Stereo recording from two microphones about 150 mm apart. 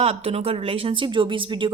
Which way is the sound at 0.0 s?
40° right (ahead or behind).